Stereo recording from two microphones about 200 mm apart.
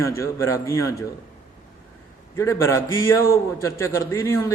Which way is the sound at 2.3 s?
15° left (ahead or behind).